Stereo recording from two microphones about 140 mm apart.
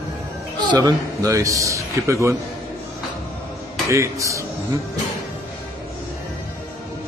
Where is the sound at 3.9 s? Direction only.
20° right (ahead or behind).